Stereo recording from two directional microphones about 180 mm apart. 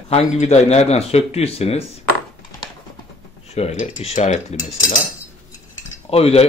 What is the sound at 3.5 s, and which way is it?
Speech, 35° left (ahead or behind).